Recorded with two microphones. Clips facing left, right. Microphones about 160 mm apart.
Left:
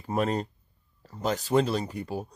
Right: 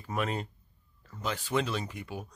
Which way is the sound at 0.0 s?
35° left (ahead or behind).